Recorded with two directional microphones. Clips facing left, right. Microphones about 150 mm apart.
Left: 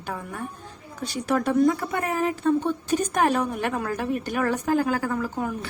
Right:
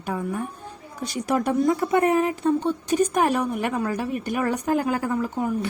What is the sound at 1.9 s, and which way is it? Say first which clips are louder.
A woman's voice: right 6 dB; 20° right (ahead or behind).